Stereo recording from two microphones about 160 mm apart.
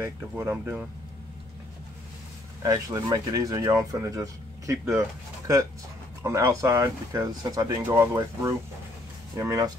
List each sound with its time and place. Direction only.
0.0 s speech: 15° right (ahead or behind)
2.6 s speech: 20° right (ahead or behind)
6.2 s speech: 20° right (ahead or behind)